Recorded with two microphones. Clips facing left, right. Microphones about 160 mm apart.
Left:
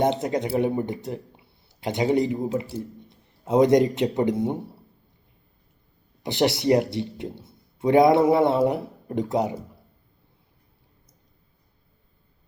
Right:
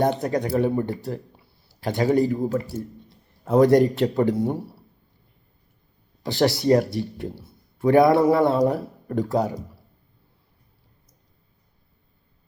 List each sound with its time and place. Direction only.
0.0 s a man's voice: 20° left (ahead or behind)
6.2 s a man's voice: 20° left (ahead or behind)